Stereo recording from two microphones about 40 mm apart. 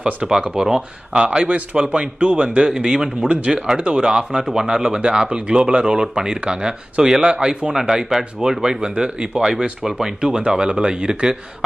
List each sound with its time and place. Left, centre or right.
0.0 s speech: right
1.1 s speech: right; by 3.8 s centre
3.8 s speech: right